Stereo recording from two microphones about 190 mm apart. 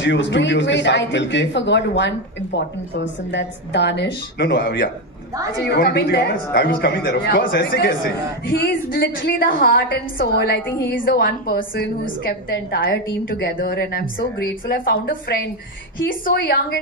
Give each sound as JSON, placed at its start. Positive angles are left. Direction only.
{"t": 0.0, "sound": "a man's voice", "side_deg": 70}
{"t": 12.4, "sound": "a woman's voice", "side_deg": 60}